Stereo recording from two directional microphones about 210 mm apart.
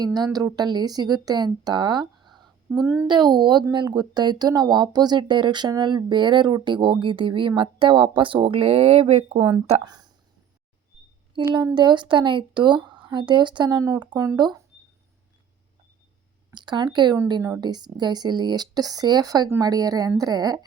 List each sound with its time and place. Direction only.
0.0 s a child's voice: 20° right (ahead or behind)
11.3 s speech: 20° right (ahead or behind)
16.6 s speech: 20° right (ahead or behind)